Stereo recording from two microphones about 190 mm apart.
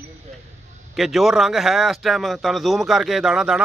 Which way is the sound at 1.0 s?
Centre (ahead or behind).